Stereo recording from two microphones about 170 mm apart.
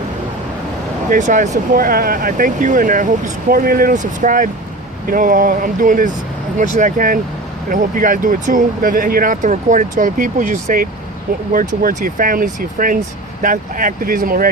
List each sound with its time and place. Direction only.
1.1 s speech: 50° right (ahead or behind)